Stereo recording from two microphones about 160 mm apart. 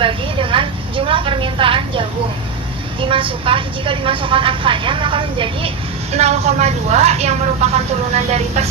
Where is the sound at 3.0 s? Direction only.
35° right (ahead or behind).